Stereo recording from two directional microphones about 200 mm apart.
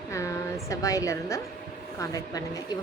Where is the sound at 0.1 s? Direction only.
15° left (ahead or behind).